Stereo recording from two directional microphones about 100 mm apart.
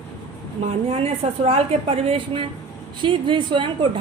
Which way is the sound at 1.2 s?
85° right.